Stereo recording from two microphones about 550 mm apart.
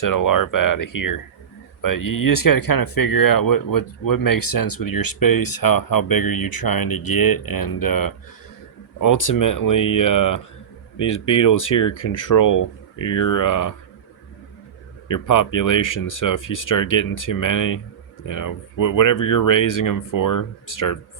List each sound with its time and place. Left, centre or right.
0.0 s speech: left
15.0 s speech: left